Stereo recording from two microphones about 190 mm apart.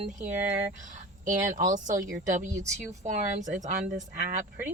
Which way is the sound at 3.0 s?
40° right (ahead or behind).